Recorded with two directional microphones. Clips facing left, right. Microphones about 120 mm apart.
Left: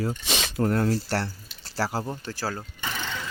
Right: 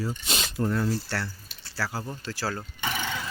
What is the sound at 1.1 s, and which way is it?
Speech, 35° left (ahead or behind).